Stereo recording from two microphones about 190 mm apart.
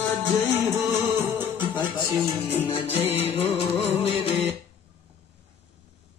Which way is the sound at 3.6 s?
30° left (ahead or behind).